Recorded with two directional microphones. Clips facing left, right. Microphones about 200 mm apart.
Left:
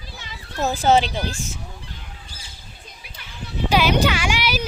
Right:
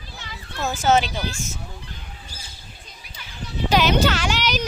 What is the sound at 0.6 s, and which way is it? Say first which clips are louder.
Speech: left 2 dB; 35° left (ahead or behind).